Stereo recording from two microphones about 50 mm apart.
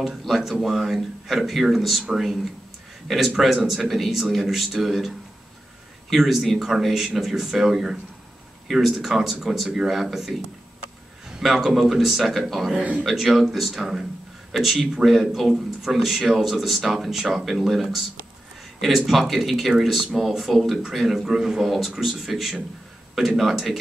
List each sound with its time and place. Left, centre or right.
0.2 s speech: centre
11.4 s speech: centre
12.7 s a man's voice: right
13.0 s speech: centre